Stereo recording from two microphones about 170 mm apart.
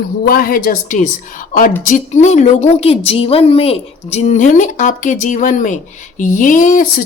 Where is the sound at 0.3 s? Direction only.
60° left (ahead or behind).